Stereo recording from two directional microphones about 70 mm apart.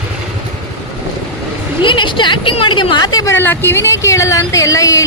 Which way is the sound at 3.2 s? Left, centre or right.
Left.